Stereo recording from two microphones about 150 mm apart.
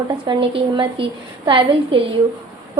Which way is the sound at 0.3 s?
35° right (ahead or behind).